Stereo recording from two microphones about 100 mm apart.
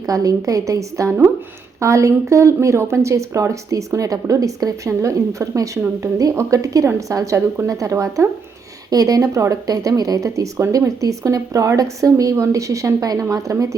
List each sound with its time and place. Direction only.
0.0 s a woman's voice: 35° right (ahead or behind)